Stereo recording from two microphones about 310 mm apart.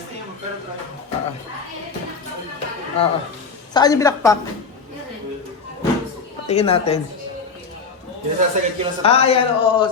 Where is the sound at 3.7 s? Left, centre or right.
Centre.